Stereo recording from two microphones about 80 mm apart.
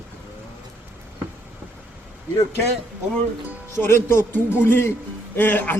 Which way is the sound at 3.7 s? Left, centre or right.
Left.